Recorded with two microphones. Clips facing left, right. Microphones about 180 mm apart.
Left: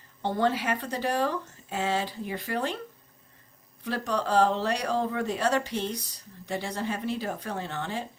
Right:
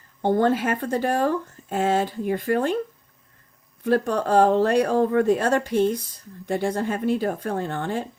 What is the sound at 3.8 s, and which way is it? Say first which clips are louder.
Speech: right 8 dB; 50° right (ahead or behind).